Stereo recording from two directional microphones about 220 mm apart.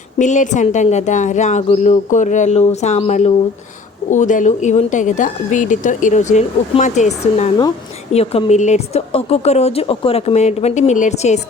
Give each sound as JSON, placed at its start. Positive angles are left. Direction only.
{"t": 0.2, "sound": "a woman's voice", "side_deg": 35}